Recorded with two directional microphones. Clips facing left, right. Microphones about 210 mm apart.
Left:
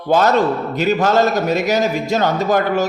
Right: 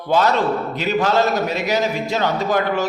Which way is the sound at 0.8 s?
45° left (ahead or behind).